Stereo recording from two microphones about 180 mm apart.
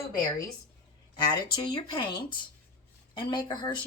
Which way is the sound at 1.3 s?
25° left (ahead or behind).